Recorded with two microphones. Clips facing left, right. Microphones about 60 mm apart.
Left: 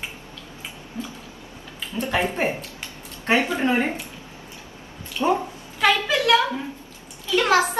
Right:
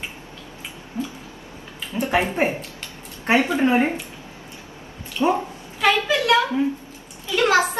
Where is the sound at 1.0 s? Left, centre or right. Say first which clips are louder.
Right 5 dB; right.